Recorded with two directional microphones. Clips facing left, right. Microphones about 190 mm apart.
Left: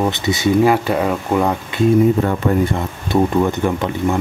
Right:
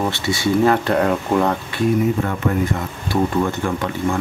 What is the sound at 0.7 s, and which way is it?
Speech, 5° left (ahead or behind).